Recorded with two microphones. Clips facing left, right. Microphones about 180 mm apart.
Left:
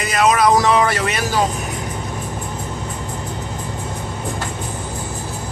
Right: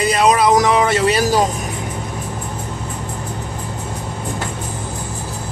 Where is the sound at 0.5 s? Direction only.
20° right (ahead or behind); by 1.4 s 35° right (ahead or behind).